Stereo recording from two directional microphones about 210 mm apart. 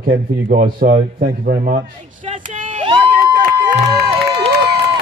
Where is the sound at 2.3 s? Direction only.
40° right (ahead or behind).